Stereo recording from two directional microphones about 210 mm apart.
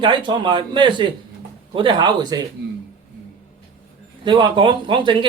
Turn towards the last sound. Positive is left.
turn(degrees=-20)  # may be behind; listen again after turning